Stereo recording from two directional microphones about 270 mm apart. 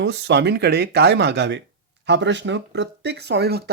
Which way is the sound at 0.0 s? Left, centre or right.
Right.